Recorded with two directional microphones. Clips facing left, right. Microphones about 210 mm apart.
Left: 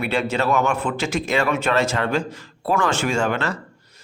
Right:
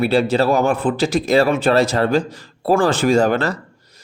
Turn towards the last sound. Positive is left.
turn(degrees=-35)  # may be behind; listen again after turning